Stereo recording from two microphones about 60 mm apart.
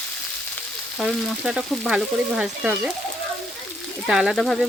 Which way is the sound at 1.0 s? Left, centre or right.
Centre.